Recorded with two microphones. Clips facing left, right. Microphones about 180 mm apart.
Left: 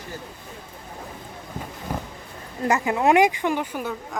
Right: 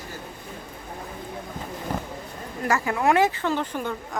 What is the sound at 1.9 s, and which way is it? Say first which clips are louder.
Roaring cats: even; 10° left (ahead or behind).